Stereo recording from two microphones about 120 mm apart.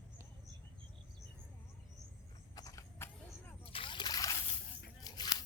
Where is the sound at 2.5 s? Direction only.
30° left (ahead or behind).